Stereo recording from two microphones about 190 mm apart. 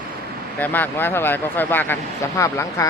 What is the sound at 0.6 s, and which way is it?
Speech, 10° left (ahead or behind).